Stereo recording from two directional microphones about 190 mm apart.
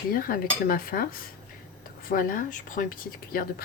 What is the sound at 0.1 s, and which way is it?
Speech, 50° left (ahead or behind).